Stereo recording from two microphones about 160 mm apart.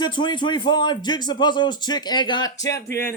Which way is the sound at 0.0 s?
30° left (ahead or behind).